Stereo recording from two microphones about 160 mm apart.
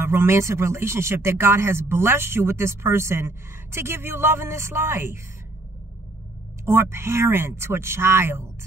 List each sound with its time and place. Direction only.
0.0 s speech: 15° right (ahead or behind)
6.6 s speech: 15° right (ahead or behind)